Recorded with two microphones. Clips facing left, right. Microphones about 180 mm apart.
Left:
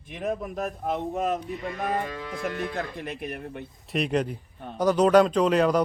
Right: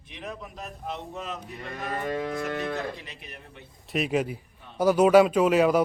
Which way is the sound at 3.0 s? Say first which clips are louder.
Left 11 dB; 55° left (ahead or behind).